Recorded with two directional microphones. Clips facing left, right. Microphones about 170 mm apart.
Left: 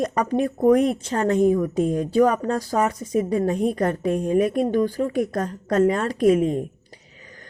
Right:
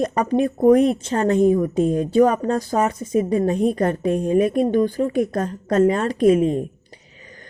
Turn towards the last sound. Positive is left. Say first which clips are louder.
# right 2 dB
turn(degrees=-25)  # may be behind; listen again after turning